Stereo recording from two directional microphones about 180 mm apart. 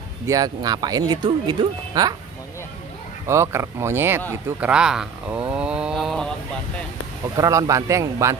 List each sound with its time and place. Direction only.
0.3 s speech: 20° right (ahead or behind)
3.3 s speech: 15° right (ahead or behind)
5.5 s a sound: 5° right (ahead or behind)
7.3 s speech: 15° right (ahead or behind)